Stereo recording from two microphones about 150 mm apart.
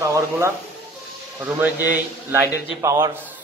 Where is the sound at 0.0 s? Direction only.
20° right (ahead or behind).